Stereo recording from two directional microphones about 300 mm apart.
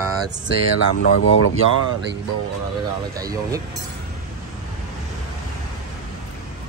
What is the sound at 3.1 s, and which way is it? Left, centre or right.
Speech, centre.